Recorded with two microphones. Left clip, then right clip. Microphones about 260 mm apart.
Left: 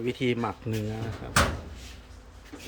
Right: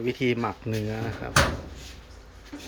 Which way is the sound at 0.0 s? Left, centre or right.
Centre.